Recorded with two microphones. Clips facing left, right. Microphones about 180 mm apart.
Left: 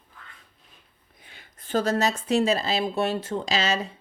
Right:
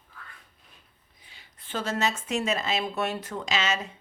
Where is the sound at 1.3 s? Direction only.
50° left (ahead or behind).